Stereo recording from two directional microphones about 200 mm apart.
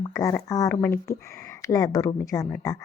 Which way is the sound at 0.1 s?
15° left (ahead or behind).